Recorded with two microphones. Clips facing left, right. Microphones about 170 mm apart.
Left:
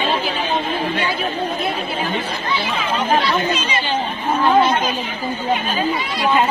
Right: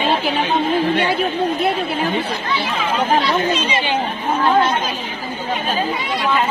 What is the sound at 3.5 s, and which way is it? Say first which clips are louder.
Speech: right 2 dB; 25° right (ahead or behind).